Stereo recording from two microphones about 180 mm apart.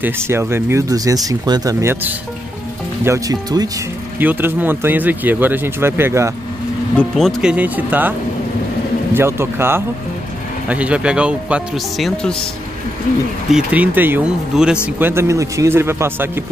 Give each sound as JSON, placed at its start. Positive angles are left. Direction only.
{"t": 0.0, "sound": "speech", "side_deg": -15}
{"t": 7.0, "sound": "speech", "side_deg": 0}
{"t": 9.1, "sound": "speech", "side_deg": -15}
{"t": 13.5, "sound": "speech", "side_deg": -5}